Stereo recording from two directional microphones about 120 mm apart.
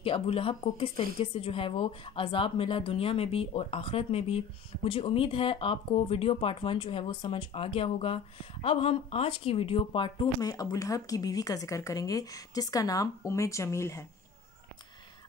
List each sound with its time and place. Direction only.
0.0 s speech: 50° left (ahead or behind)
10.4 s a woman's voice: 30° left (ahead or behind)